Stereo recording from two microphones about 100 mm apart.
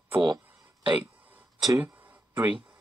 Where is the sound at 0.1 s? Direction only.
50° right (ahead or behind).